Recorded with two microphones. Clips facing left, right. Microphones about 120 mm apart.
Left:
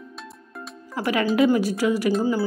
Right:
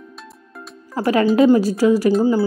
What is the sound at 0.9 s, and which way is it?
Speech, 35° right (ahead or behind).